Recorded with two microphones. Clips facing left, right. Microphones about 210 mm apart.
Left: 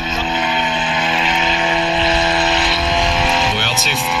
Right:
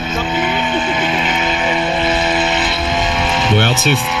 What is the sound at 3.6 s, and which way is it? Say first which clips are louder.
Music: right 7 dB; 55° right (ahead or behind).